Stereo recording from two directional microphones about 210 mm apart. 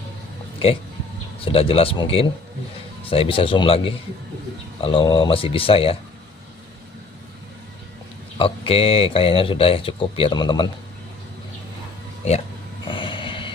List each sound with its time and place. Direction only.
1.4 s speech: 25° left (ahead or behind)
8.4 s speech: 25° left (ahead or behind)
12.8 s a sound: 25° left (ahead or behind)